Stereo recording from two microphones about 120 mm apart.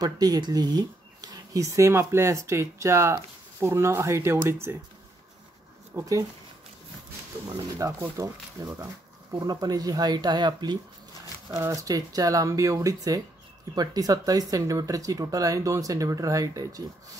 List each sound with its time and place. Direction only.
0.0 s speech: 35° right (ahead or behind)
5.9 s speech: 25° right (ahead or behind)
7.5 s speech: 30° right (ahead or behind)
11.5 s speech: 25° right (ahead or behind)